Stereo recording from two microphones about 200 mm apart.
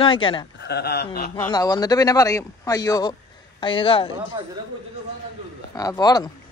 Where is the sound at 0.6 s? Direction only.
55° left (ahead or behind).